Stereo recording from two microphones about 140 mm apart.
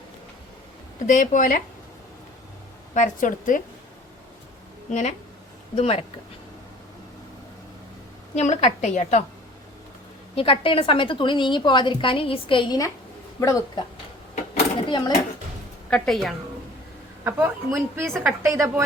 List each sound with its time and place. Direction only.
1.0 s a woman's voice: 65° left (ahead or behind)
2.9 s a woman's voice: 65° left (ahead or behind)
4.9 s a woman's voice: 60° left (ahead or behind)
5.7 s speech: 45° left (ahead or behind)
8.4 s a woman's voice: 55° left (ahead or behind)
10.3 s a woman's voice: 40° left (ahead or behind)
14.8 s speech: 35° left (ahead or behind)
15.9 s a woman's voice: centre (ahead or behind)
17.2 s a woman's voice: 15° right (ahead or behind)